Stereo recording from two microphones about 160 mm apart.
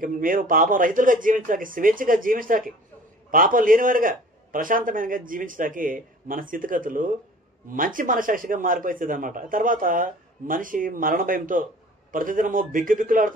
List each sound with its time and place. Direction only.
0.0 s a man's voice: 60° right (ahead or behind)